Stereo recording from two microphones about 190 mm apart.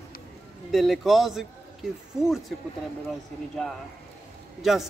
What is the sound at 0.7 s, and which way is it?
A man's voice, centre (ahead or behind).